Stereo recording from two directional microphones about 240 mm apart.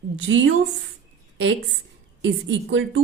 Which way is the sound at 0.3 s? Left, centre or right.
Right.